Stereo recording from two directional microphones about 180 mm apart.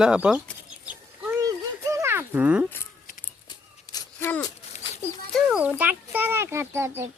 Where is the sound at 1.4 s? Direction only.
20° right (ahead or behind).